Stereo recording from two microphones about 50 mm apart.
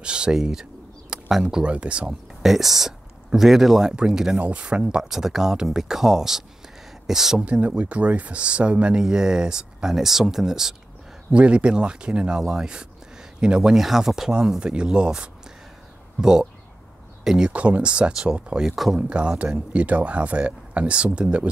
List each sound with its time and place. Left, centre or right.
0.0 s speech: centre
1.6 s speech: right
2.4 s speech: centre
4.4 s speech: right
7.3 s speech: right
11.3 s speech: right
17.2 s a sound: centre
17.5 s speech: right
18.7 s speech: centre
18.9 s speech: right